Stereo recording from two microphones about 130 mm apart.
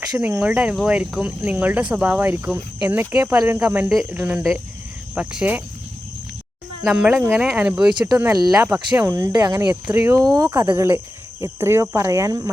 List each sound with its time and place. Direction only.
0.2 s speech: 10° right (ahead or behind)
6.8 s speech: 5° right (ahead or behind)
7.2 s speech: 15° right (ahead or behind)
8.3 s speech: 30° right (ahead or behind)
9.8 s speech: 20° right (ahead or behind)